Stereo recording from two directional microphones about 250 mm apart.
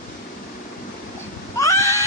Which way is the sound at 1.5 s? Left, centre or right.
Centre.